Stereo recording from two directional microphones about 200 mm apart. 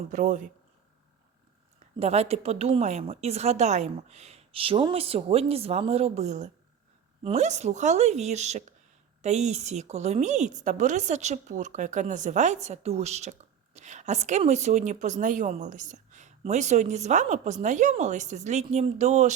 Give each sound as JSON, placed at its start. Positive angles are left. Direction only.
{"t": 0.1, "sound": "a woman's voice", "side_deg": -40}
{"t": 2.0, "sound": "a woman's voice", "side_deg": -30}